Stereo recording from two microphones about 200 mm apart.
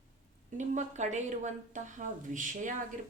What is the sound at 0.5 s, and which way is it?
Speech, 35° right (ahead or behind).